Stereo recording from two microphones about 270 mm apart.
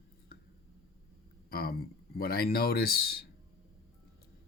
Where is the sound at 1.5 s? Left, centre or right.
Left.